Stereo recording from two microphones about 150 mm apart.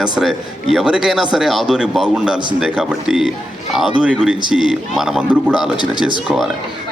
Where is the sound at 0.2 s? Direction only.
Centre (ahead or behind).